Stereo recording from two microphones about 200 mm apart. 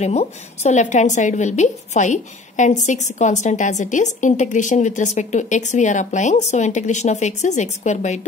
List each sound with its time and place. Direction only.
0.0 s a woman's voice: 35° left (ahead or behind)